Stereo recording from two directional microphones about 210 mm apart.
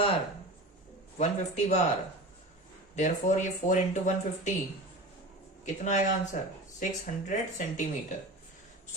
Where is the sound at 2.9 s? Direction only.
35° left (ahead or behind).